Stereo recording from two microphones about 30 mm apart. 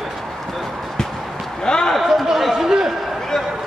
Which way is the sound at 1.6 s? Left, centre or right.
Left.